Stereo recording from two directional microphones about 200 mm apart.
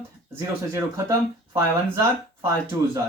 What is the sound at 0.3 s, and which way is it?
Speech, 15° right (ahead or behind).